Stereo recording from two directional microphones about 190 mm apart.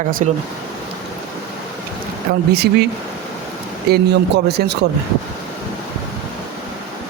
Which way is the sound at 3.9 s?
60° right (ahead or behind).